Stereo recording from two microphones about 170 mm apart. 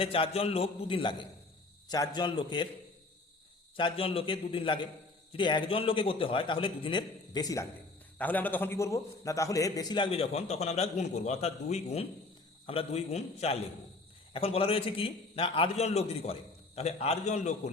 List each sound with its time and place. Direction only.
0.0 s a man's voice: 35° left (ahead or behind)
3.8 s a man's voice: 30° left (ahead or behind)
8.2 s a man's voice: 10° left (ahead or behind); by 17.6 s 45° left (ahead or behind)